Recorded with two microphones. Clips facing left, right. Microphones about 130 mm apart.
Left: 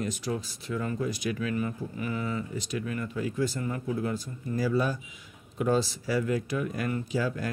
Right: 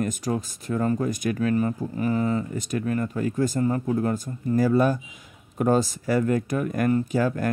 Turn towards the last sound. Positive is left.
turn(degrees=-50)  # may be behind; listen again after turning